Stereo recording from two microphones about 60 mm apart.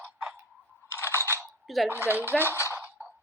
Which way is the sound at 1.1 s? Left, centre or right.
Right.